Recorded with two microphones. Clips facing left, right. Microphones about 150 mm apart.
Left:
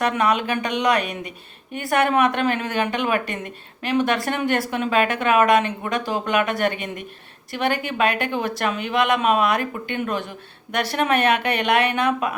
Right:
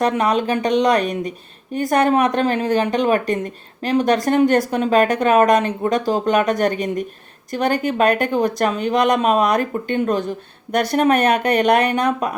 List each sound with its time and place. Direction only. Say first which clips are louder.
0.0 s speech: right 3 dB; 35° right (ahead or behind)